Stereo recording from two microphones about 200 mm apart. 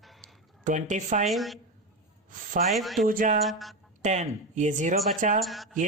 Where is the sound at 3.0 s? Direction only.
45° right (ahead or behind).